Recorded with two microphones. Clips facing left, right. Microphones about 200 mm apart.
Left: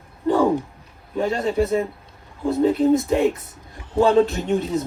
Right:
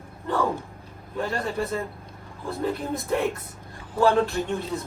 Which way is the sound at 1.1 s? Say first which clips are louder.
Left 7 dB; 20° left (ahead or behind).